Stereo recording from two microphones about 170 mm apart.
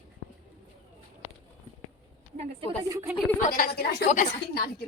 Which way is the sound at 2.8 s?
20° right (ahead or behind).